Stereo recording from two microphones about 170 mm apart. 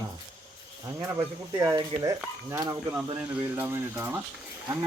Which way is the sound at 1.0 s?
15° right (ahead or behind).